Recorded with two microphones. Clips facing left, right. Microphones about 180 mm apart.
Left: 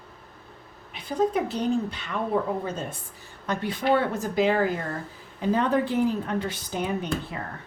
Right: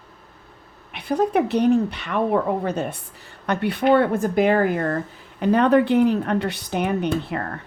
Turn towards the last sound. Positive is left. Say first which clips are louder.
# right 6 dB
turn(degrees=-70)  # may be behind; listen again after turning